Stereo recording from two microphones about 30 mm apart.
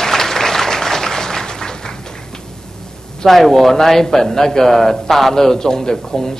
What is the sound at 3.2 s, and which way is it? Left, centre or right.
Speech, centre.